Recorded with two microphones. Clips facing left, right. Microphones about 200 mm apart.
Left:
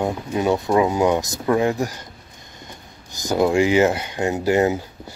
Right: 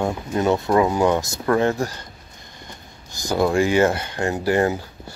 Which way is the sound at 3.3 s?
20° left (ahead or behind).